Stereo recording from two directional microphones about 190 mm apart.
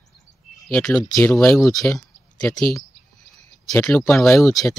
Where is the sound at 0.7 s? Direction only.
5° left (ahead or behind).